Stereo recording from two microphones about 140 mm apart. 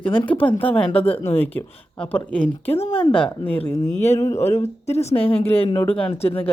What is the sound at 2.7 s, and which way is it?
Speech, 45° left (ahead or behind).